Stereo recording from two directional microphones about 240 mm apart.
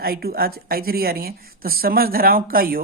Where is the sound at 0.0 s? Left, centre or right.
Right.